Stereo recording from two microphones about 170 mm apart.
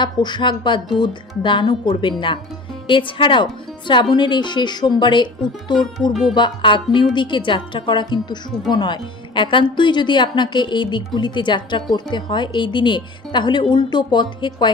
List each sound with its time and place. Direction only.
0.0 s speech: 25° left (ahead or behind)